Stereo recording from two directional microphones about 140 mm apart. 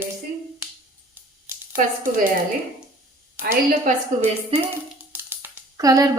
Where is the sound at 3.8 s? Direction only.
50° right (ahead or behind).